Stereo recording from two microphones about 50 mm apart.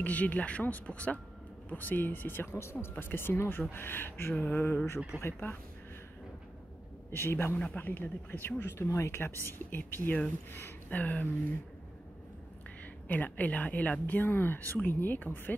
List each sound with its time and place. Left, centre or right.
0.0 s speech: left
1.7 s speech: left
2.9 s speech: left
4.6 s speech: left
5.2 s speech: left
7.1 s speech: left
7.5 s speech: left
7.8 s speech: left
10.9 s speech: left
12.8 s a woman's voice: left